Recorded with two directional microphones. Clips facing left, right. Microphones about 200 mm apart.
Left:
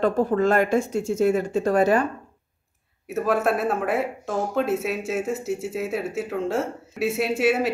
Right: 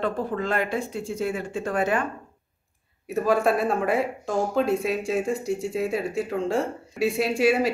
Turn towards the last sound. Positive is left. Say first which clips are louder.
# even
turn(degrees=0)  # may be behind; listen again after turning